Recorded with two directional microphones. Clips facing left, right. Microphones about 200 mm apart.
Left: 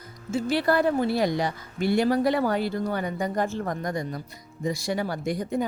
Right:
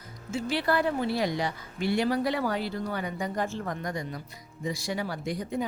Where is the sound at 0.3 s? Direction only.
40° left (ahead or behind).